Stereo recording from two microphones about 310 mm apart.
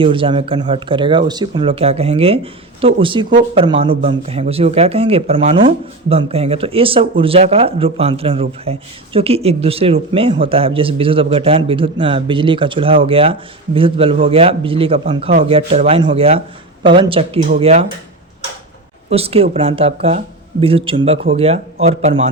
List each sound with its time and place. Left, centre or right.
0.0 s speech: centre
19.1 s speech: centre